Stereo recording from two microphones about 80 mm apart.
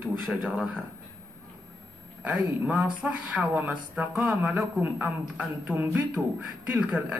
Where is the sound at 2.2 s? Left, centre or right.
Centre.